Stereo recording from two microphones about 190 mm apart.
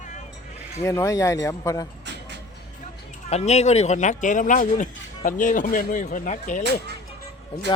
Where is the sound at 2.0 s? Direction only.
65° right (ahead or behind).